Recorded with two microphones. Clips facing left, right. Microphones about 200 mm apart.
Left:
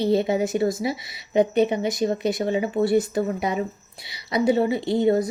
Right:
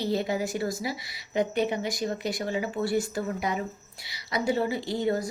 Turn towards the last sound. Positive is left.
turn(degrees=20)  # may be behind; listen again after turning